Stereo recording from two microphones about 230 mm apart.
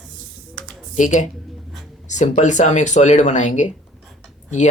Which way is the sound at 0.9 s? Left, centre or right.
Left.